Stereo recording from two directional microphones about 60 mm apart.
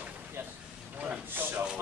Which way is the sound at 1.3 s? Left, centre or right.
Right.